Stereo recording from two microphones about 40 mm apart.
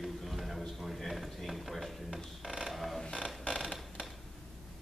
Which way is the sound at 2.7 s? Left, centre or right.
Centre.